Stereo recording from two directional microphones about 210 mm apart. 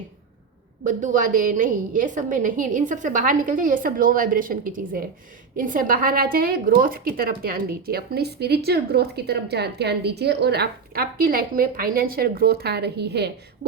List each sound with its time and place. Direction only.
0.9 s a woman's voice: 40° right (ahead or behind)